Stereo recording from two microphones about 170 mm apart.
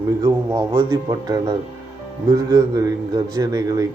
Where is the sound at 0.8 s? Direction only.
15° right (ahead or behind).